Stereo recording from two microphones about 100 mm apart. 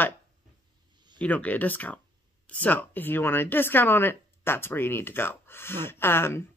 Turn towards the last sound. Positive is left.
turn(degrees=25)  # may be behind; listen again after turning